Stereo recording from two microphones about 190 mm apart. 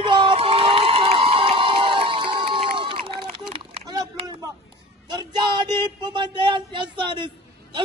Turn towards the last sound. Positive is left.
turn(degrees=-25)  # may be behind; listen again after turning